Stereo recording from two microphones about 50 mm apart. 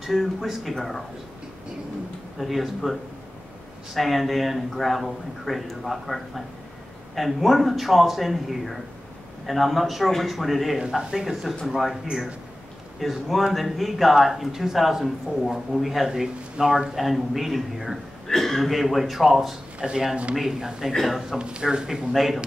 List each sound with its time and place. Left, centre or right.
0.0 s speech: centre
2.3 s speech: centre
10.9 s speech: centre
19.8 s speech: centre
20.3 s speech: centre
21.4 s speech: centre
22.1 s speech: centre